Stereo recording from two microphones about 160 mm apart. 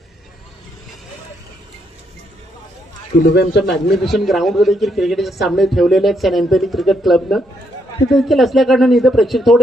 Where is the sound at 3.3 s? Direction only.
90° left.